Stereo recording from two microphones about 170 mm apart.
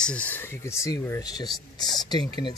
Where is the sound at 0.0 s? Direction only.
10° left (ahead or behind).